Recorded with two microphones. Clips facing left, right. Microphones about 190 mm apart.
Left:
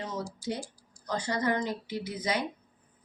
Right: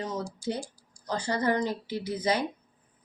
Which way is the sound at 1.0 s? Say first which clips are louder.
Right 2 dB; 30° right (ahead or behind).